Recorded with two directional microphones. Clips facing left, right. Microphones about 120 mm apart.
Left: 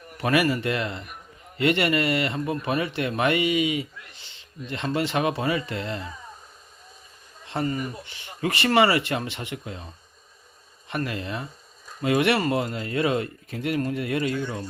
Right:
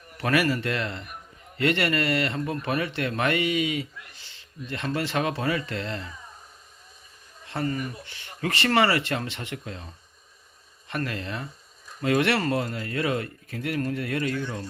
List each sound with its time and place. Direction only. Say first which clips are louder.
0.2 s speech: left 2 dB; 15° left (ahead or behind)
7.4 s speech: left 2 dB; 20° left (ahead or behind)